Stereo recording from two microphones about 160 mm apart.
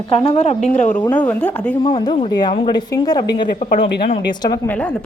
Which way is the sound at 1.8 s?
30° left (ahead or behind).